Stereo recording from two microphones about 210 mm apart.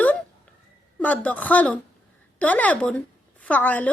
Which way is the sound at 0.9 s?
5° left (ahead or behind).